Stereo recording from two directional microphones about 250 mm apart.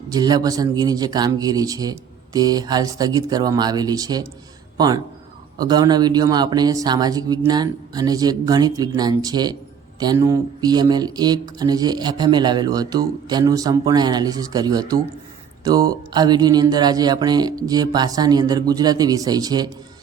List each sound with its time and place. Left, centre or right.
0.1 s speech: centre
5.5 s speech: centre